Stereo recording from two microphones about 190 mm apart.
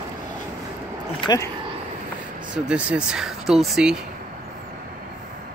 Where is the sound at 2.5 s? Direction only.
5° right (ahead or behind).